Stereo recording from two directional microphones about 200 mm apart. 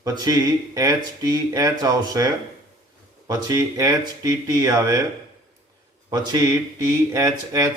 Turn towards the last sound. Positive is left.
turn(degrees=-15)  # may be behind; listen again after turning